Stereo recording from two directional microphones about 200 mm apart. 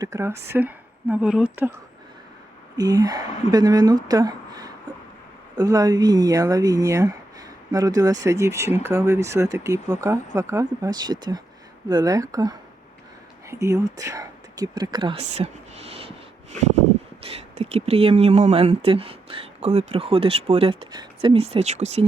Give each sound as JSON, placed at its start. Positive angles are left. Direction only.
{"t": 0.0, "sound": "speech", "side_deg": -15}
{"t": 2.7, "sound": "speech", "side_deg": -20}
{"t": 17.2, "sound": "speech", "side_deg": -30}